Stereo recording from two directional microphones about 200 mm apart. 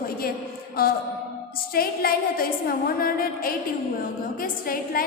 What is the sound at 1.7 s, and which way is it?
A woman's voice, 45° left (ahead or behind).